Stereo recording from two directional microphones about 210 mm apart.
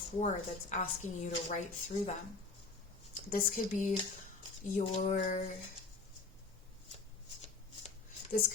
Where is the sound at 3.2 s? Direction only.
40° left (ahead or behind).